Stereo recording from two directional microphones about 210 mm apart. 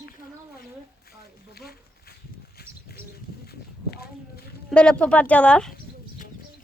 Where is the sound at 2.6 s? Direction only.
50° left (ahead or behind).